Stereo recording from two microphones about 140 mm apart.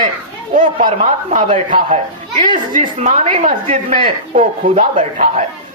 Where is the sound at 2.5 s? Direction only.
70° right (ahead or behind).